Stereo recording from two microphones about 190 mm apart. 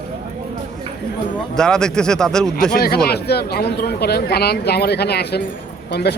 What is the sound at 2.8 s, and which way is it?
Speech, 55° left (ahead or behind).